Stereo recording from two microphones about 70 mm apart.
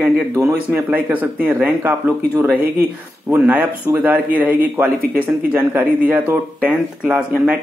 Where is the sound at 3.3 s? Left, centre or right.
Centre.